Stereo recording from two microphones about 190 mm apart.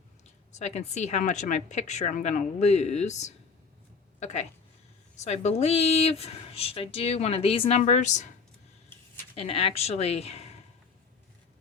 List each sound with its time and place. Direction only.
0.5 s speech: 35° left (ahead or behind)
9.3 s speech: 30° left (ahead or behind)